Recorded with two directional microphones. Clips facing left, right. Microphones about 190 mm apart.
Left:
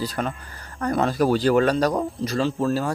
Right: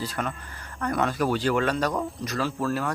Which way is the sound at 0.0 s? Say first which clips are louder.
Left 4 dB; 35° left (ahead or behind).